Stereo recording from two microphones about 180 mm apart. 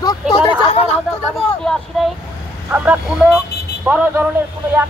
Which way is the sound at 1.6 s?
Centre (ahead or behind).